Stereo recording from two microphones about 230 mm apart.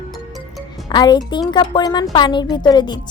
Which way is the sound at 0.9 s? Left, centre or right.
Centre.